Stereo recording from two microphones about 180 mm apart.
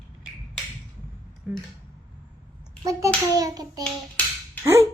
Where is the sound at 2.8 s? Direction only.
20° right (ahead or behind).